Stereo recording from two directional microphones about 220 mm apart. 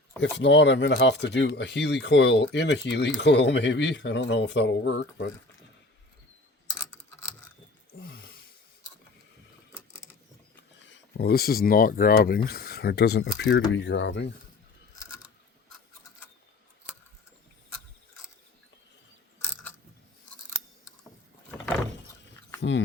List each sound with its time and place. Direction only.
0.2 s speech: 55° left (ahead or behind)
8.0 s a sound: 45° left (ahead or behind)
10.8 s speech: 50° left (ahead or behind)